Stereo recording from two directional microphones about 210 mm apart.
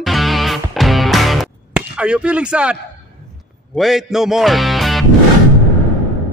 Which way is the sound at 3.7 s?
Centre (ahead or behind).